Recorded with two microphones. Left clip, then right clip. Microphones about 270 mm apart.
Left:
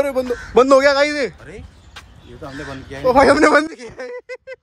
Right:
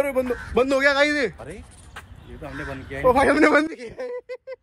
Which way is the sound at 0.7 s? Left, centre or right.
Centre.